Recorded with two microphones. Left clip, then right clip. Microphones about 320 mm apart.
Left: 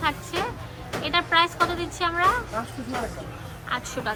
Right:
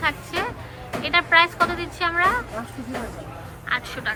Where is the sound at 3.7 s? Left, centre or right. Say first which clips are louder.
Right 3 dB; centre.